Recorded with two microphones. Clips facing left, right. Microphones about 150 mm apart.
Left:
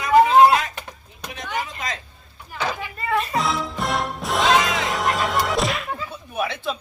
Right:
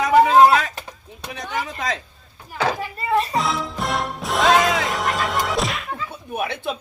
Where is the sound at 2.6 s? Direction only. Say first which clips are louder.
Right 3 dB; 35° right (ahead or behind).